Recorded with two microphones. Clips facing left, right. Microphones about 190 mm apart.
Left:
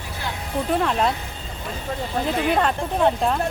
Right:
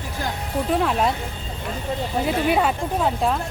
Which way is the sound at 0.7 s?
5° right (ahead or behind).